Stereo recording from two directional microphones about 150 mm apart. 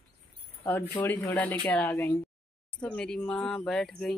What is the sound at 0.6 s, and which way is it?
A woman's voice, 15° left (ahead or behind).